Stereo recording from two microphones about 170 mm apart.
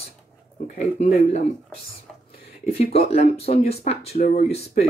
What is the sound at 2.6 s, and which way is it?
Speech, 35° left (ahead or behind).